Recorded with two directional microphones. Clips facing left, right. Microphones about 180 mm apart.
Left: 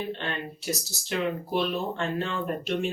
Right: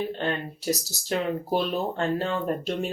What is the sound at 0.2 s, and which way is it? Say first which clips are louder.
Speech: right 5 dB; 40° right (ahead or behind).